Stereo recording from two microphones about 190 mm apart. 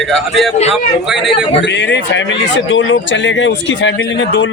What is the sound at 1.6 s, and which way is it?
Speech, 65° left (ahead or behind).